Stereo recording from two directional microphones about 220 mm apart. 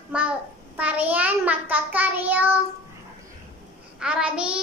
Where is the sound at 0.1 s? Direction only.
5° right (ahead or behind).